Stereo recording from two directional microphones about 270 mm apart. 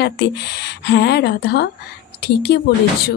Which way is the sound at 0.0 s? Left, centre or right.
Left.